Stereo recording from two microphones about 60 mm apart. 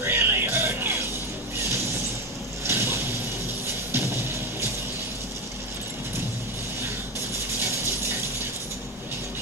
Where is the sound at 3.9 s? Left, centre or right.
Right.